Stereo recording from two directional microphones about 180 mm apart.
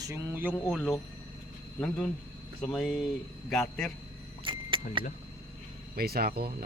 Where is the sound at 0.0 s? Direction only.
15° right (ahead or behind).